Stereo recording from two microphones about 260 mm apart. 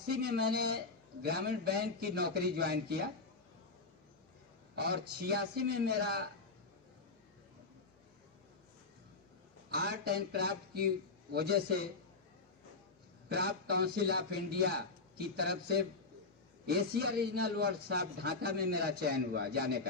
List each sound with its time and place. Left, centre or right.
0.1 s a man's voice: right
4.7 s a man's voice: right
9.7 s a man's voice: right
13.2 s a man's voice: right